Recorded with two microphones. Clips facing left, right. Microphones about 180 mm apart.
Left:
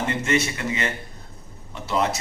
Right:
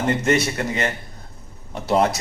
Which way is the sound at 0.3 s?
40° right (ahead or behind).